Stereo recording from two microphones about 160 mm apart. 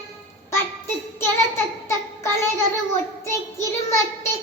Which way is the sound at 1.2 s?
15° left (ahead or behind).